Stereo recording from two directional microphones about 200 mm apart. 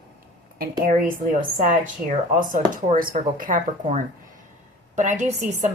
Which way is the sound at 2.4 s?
40° right (ahead or behind).